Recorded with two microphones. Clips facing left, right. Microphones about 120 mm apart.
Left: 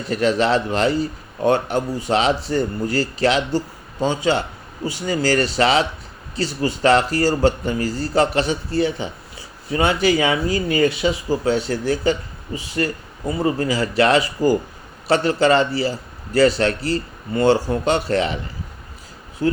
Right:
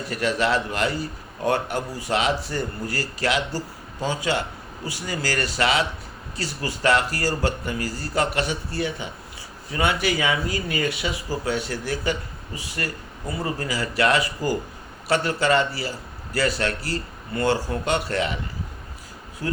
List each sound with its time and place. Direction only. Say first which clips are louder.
0.0 s speech: left 5 dB; 25° left (ahead or behind)
19.4 s speech: left 8 dB; 25° left (ahead or behind)